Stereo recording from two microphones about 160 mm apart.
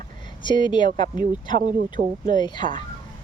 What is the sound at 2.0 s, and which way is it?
Speech, 75° right (ahead or behind).